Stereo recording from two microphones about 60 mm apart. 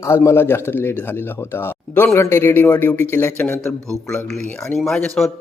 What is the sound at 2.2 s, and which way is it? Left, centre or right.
Speech, left.